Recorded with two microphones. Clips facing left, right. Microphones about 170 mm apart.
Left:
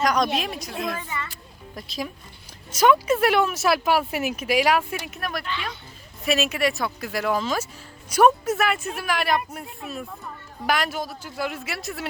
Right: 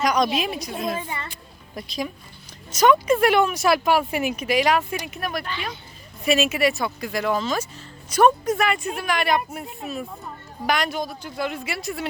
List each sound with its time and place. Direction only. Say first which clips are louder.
0.0 s speech: right 1 dB; centre (ahead or behind)
0.7 s a woman's voice: right 2 dB; 25° right (ahead or behind)
1.3 s a sound: right 1 dB; centre (ahead or behind)
2.7 s speech: right 1 dB; 5° left (ahead or behind)
10.7 s speech: right 1 dB; 5° left (ahead or behind)